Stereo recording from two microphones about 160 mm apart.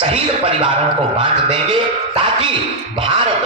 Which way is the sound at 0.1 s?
35° right (ahead or behind).